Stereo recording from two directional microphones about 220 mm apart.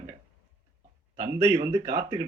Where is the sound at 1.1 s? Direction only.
15° right (ahead or behind).